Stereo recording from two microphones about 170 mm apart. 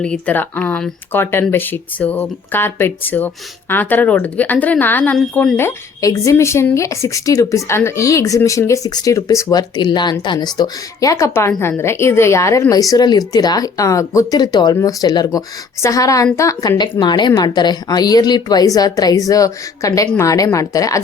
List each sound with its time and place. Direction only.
0.0 s a woman's voice: 5° left (ahead or behind)